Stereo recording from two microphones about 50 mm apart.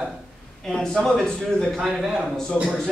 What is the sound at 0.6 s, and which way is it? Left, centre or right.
Speech, centre.